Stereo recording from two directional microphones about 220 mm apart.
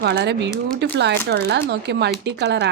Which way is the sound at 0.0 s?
50° right (ahead or behind).